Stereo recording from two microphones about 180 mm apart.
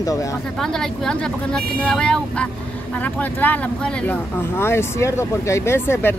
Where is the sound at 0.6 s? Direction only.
5° left (ahead or behind).